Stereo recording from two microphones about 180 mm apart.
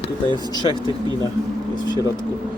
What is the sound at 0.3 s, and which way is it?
Speech, 25° left (ahead or behind).